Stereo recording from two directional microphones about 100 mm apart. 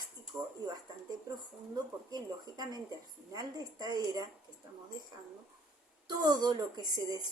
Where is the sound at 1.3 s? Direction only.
40° right (ahead or behind).